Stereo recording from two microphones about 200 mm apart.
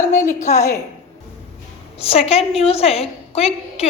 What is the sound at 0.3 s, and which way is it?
Speech, 35° left (ahead or behind).